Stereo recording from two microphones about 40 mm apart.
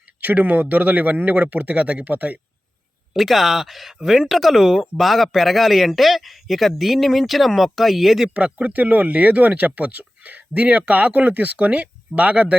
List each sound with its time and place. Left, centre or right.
0.4 s speech: right
3.1 s speech: centre
8.3 s speech: right
8.7 s speech: right